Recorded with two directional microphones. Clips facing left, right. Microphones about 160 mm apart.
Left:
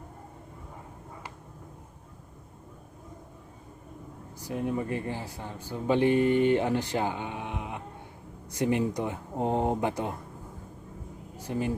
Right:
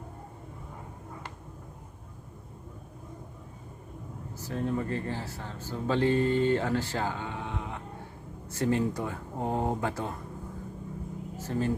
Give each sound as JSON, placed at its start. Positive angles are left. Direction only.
{"t": 4.4, "sound": "speech", "side_deg": 15}
{"t": 11.3, "sound": "speech", "side_deg": 15}